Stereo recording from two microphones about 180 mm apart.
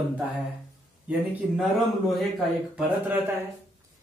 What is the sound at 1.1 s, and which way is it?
Speech, 5° right (ahead or behind).